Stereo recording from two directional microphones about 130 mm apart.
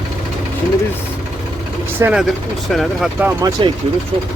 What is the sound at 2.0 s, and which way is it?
Speech, 10° right (ahead or behind).